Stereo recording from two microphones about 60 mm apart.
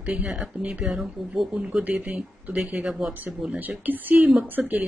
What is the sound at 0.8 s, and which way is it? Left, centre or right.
Speech, centre.